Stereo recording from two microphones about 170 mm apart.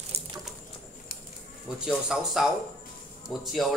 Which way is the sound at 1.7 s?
5° right (ahead or behind).